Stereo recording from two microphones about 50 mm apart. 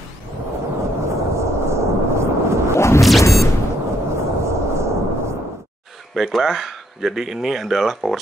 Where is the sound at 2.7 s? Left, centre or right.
Left.